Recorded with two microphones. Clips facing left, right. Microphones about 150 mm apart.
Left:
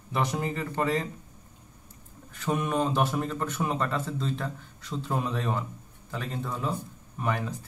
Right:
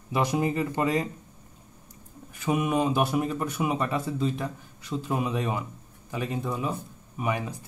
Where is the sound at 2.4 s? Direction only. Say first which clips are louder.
Right 2 dB; 10° right (ahead or behind).